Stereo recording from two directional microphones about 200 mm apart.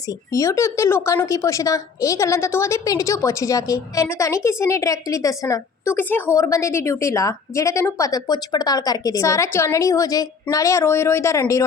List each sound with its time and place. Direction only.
0.1 s speech: 15° left (ahead or behind)